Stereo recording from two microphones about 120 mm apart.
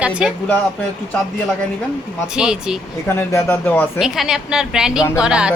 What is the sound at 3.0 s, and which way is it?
Speech, 20° left (ahead or behind).